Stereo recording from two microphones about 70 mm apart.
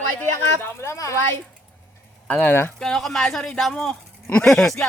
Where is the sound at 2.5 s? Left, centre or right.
Left.